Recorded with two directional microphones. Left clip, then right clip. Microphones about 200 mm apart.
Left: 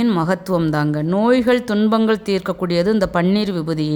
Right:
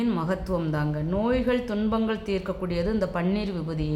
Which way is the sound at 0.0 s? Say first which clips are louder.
Left 9 dB; 50° left (ahead or behind).